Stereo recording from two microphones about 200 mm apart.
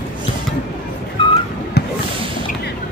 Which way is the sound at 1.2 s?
25° left (ahead or behind).